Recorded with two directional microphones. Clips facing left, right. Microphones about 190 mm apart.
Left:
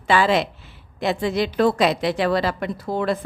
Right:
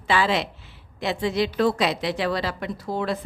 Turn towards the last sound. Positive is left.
turn(degrees=55)  # may be behind; listen again after turning